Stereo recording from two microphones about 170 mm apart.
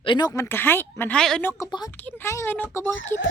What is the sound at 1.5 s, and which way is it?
Speech, 20° left (ahead or behind).